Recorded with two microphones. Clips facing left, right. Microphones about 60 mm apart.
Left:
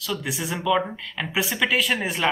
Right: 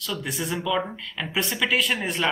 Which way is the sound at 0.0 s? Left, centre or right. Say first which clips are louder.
Left 1 dB; centre.